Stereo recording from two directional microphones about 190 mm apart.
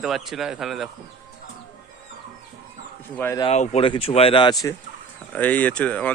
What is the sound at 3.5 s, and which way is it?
Speech, 35° left (ahead or behind).